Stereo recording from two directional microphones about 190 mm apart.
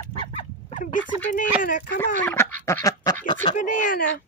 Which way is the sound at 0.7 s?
45° left (ahead or behind).